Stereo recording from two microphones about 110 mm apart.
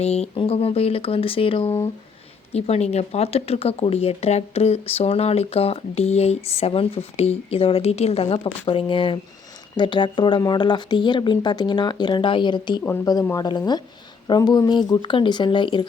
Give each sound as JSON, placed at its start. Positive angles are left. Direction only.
{"t": 0.0, "sound": "speech", "side_deg": 75}
{"t": 0.3, "sound": "speech", "side_deg": 60}
{"t": 2.5, "sound": "speech", "side_deg": 70}